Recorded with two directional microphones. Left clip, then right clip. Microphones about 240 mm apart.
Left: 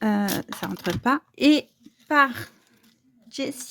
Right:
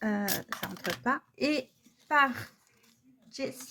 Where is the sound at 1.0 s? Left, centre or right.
Left.